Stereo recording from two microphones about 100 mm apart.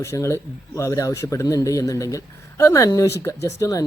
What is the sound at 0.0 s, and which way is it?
A man's voice, 30° left (ahead or behind).